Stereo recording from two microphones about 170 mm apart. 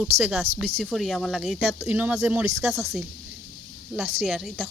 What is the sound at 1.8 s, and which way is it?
Speech, 10° right (ahead or behind).